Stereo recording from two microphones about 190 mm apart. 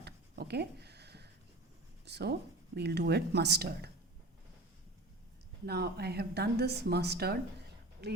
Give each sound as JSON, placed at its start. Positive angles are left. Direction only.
{"t": 0.0, "sound": "a sound", "side_deg": -60}
{"t": 2.0, "sound": "speech", "side_deg": -60}
{"t": 5.6, "sound": "speech", "side_deg": -55}